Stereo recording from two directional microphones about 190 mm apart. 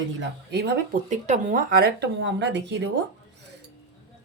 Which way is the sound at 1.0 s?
40° right (ahead or behind).